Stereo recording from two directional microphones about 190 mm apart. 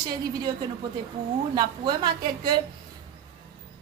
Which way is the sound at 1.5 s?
25° right (ahead or behind).